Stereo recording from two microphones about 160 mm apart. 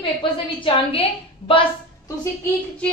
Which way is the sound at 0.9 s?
35° left (ahead or behind).